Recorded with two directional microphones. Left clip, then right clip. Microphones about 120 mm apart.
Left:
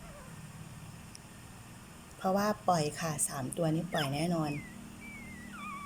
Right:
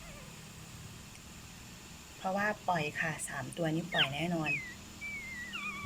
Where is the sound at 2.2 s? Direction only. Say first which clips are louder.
Left 2 dB; 25° left (ahead or behind).